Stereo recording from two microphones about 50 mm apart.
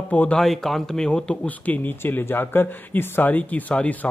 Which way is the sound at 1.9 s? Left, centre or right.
Left.